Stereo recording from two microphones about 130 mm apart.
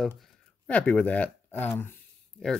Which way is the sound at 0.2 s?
10° left (ahead or behind).